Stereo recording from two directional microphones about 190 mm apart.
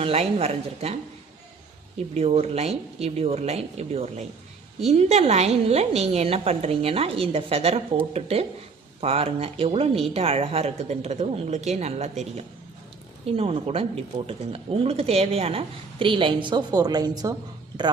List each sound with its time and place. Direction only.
0.0 s speech: 30° right (ahead or behind)
2.1 s speech: 30° right (ahead or behind)